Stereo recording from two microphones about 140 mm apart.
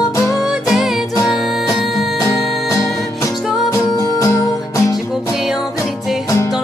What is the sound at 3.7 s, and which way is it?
Music, 25° left (ahead or behind).